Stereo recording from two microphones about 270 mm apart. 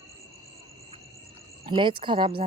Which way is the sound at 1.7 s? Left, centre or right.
Centre.